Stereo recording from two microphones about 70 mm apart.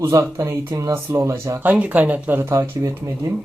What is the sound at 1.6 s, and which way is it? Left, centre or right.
Speech, right.